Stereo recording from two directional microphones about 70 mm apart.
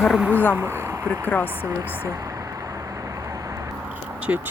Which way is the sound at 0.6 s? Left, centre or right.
Right.